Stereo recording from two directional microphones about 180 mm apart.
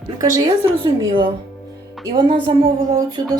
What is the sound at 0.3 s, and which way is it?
Speech, 20° right (ahead or behind).